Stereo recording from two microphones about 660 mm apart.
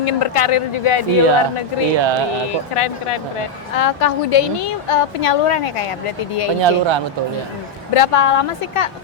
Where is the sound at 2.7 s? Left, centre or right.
Left.